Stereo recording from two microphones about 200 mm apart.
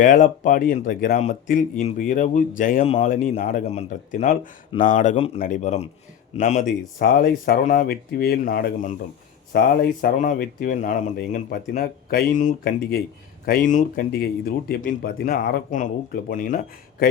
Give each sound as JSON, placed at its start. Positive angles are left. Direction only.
{"t": 0.0, "sound": "speech", "side_deg": 40}
{"t": 2.8, "sound": "speech", "side_deg": 30}
{"t": 3.1, "sound": "speech", "side_deg": 40}
{"t": 5.1, "sound": "speech", "side_deg": 30}